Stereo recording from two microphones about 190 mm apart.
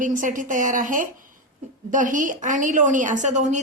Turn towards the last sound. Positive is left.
turn(degrees=-40)  # may be behind; listen again after turning